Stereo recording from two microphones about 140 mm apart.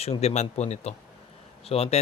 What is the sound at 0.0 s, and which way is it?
A man's voice, 50° left (ahead or behind).